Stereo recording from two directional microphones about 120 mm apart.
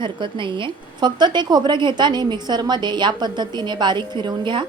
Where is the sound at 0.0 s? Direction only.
40° right (ahead or behind).